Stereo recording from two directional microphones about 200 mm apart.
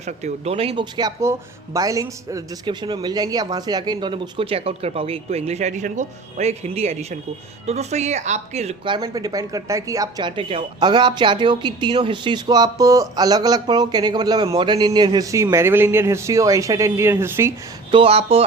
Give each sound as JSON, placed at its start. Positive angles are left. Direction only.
{"t": 0.0, "sound": "speech", "side_deg": -35}
{"t": 17.9, "sound": "speech", "side_deg": -30}